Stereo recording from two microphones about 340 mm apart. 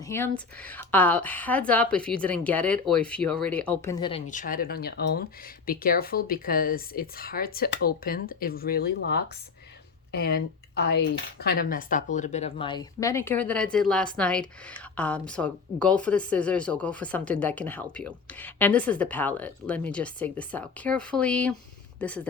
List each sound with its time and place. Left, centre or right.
0.1 s speech: centre